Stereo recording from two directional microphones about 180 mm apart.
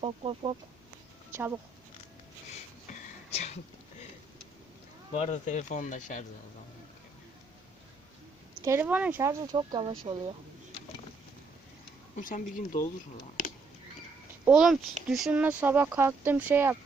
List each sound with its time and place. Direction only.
0.0 s speech: 30° right (ahead or behind)
1.3 s speech: 10° right (ahead or behind)
3.3 s a sound: 35° left (ahead or behind)
5.1 s speech: 40° left (ahead or behind)
8.6 s speech: 10° right (ahead or behind)
9.4 s speech: 25° right (ahead or behind)
12.1 s speech: 45° left (ahead or behind)
14.4 s speech: 5° right (ahead or behind)